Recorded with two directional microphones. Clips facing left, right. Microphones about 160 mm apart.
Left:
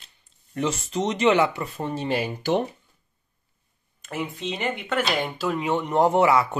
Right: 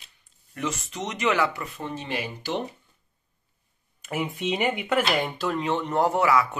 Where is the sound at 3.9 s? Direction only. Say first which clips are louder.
Right 1 dB; 10° right (ahead or behind).